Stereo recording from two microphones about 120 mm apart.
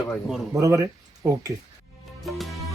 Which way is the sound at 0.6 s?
30° right (ahead or behind).